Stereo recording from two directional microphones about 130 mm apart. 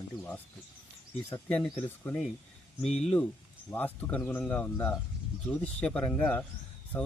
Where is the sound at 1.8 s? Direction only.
15° left (ahead or behind).